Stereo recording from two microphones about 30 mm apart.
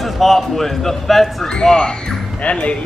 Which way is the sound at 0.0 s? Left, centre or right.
Centre.